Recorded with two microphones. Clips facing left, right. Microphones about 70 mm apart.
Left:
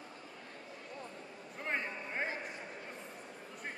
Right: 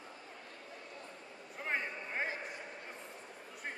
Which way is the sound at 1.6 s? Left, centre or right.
Centre.